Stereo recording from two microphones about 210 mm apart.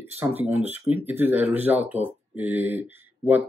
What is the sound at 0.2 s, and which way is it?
Speech, 10° right (ahead or behind).